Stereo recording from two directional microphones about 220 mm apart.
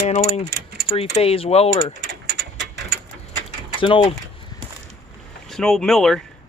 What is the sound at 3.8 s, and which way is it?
Speech, 25° left (ahead or behind).